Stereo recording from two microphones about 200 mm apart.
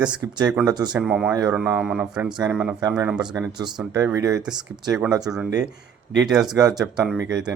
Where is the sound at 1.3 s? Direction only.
15° right (ahead or behind).